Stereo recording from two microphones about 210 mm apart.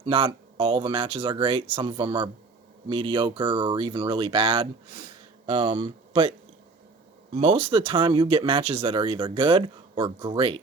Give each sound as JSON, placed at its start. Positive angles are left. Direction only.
{"t": 0.0, "sound": "speech", "side_deg": -25}
{"t": 7.3, "sound": "speech", "side_deg": -30}